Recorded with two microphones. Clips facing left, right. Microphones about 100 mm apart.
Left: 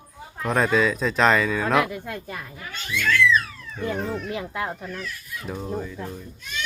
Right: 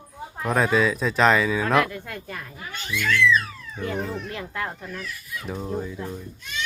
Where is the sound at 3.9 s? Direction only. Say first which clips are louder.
Even; centre (ahead or behind).